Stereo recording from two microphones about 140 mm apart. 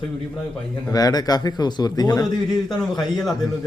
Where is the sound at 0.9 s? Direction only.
25° left (ahead or behind).